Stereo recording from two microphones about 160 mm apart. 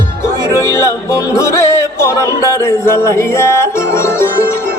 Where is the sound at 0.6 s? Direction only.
15° left (ahead or behind).